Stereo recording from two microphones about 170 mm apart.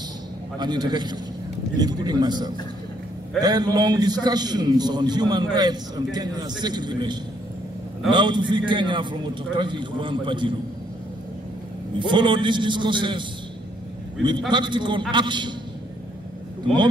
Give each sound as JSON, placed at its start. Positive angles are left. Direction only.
{"t": 0.6, "sound": "a man's voice", "side_deg": -25}
{"t": 12.0, "sound": "a man's voice", "side_deg": -30}
{"t": 14.5, "sound": "a man's voice", "side_deg": -25}